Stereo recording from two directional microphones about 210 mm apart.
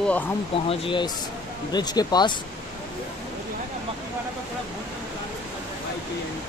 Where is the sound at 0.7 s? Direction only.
25° left (ahead or behind).